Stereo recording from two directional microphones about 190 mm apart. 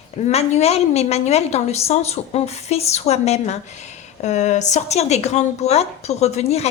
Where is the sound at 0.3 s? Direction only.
35° left (ahead or behind).